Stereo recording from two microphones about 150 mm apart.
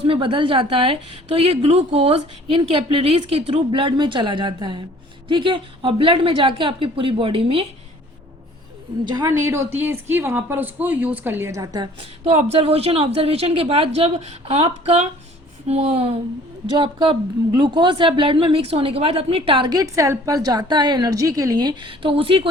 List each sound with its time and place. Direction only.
0.1 s a woman's voice: 35° right (ahead or behind)
9.0 s a woman's voice: 30° right (ahead or behind)
9.4 s speech: 15° right (ahead or behind)
12.2 s a woman's voice: 45° right (ahead or behind)